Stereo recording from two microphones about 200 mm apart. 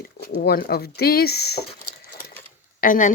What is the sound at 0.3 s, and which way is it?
Speech, 50° left (ahead or behind).